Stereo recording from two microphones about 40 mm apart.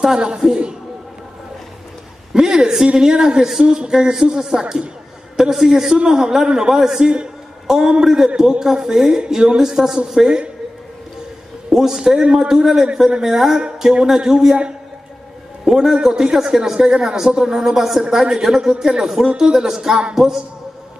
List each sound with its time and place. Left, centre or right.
0.4 s a man's voice: centre
2.3 s a man's voice: centre
11.7 s a man's voice: centre
15.6 s a man's voice: centre